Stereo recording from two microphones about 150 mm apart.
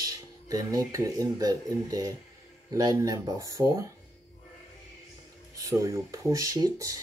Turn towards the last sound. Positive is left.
turn(degrees=-25)  # may be behind; listen again after turning